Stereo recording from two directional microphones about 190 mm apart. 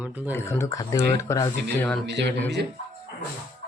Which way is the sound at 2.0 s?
65° right (ahead or behind).